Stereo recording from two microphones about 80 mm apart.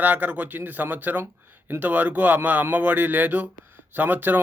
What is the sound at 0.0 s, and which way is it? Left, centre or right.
Speech, right.